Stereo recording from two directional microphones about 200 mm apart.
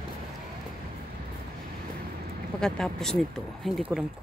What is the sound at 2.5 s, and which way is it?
Speech, 5° left (ahead or behind).